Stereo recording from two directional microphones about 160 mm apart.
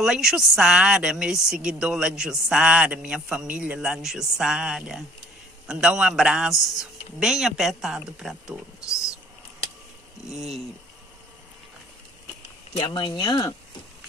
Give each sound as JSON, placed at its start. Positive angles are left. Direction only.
{"t": 0.0, "sound": "speech", "side_deg": -5}
{"t": 10.3, "sound": "speech", "side_deg": 0}
{"t": 12.7, "sound": "speech", "side_deg": 30}